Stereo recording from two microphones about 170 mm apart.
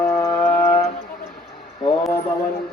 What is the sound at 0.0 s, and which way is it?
Music, 15° left (ahead or behind).